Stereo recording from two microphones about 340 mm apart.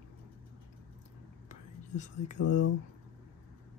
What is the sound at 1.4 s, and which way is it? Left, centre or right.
Whispering, left.